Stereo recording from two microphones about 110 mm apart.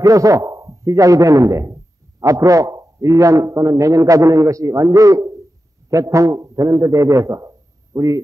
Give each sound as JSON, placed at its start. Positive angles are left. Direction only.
{"t": 0.0, "sound": "a man's voice", "side_deg": -30}